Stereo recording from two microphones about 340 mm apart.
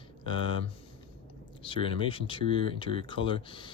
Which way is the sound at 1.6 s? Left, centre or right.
Centre.